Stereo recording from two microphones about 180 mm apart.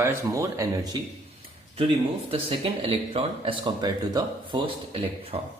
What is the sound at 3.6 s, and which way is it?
Speech, 20° right (ahead or behind).